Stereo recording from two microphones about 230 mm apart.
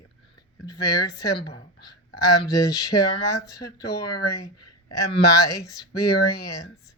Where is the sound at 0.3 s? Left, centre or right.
Centre.